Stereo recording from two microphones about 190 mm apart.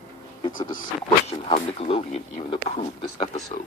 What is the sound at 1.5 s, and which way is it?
Speech, 30° left (ahead or behind).